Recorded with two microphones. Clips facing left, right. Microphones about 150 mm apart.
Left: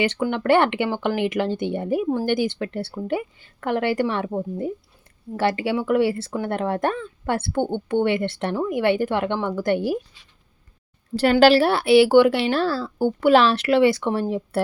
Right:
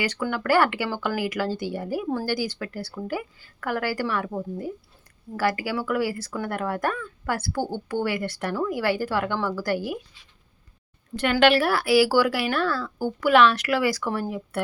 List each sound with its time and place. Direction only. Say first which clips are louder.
0.0 s speech: left 5 dB; 25° left (ahead or behind)
11.1 s speech: left 5 dB; 35° left (ahead or behind)